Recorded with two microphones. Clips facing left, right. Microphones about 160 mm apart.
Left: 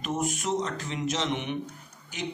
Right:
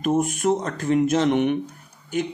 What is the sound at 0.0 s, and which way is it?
A man's voice, 55° right (ahead or behind).